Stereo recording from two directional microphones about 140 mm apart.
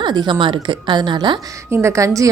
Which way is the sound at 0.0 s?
30° right (ahead or behind).